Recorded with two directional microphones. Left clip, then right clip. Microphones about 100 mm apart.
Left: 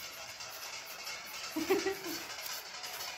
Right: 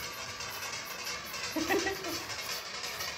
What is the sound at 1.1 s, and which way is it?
Music, 40° right (ahead or behind).